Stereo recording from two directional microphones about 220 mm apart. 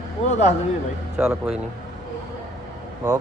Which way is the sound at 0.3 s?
30° left (ahead or behind).